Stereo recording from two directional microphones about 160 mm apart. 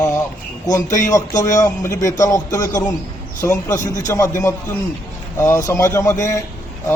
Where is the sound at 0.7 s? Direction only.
20° left (ahead or behind).